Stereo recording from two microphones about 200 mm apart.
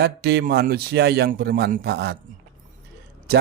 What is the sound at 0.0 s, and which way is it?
Speech, 55° right (ahead or behind).